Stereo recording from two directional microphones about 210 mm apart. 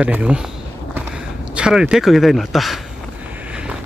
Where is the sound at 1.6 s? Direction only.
5° right (ahead or behind).